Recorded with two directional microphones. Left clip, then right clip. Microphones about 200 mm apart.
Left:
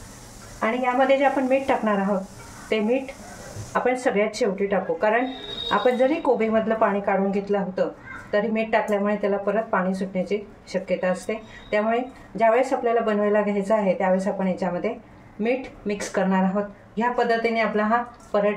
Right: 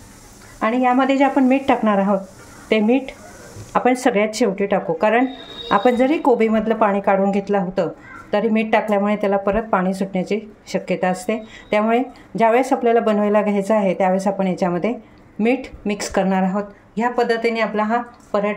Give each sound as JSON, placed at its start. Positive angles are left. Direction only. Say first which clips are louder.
{"t": 0.6, "sound": "speech", "louder": "right 4 dB", "side_deg": -50}